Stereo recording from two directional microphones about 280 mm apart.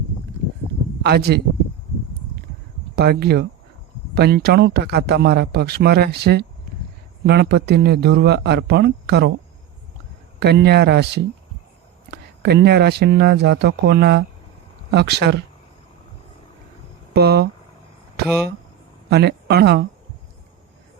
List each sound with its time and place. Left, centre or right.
1.0 s a man's voice: right
2.9 s a man's voice: right
10.4 s a man's voice: right
17.2 s a man's voice: right
19.1 s a man's voice: right